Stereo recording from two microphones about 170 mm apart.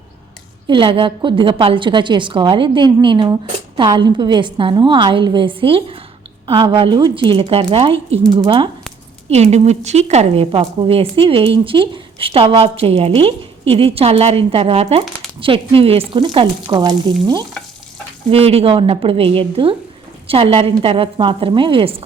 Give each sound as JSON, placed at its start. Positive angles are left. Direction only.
{"t": 0.7, "sound": "a woman's voice", "side_deg": -30}
{"t": 9.3, "sound": "a woman's voice", "side_deg": -40}
{"t": 18.3, "sound": "a woman's voice", "side_deg": -35}